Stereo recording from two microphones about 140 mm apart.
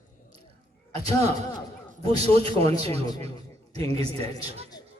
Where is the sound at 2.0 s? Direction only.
45° right (ahead or behind).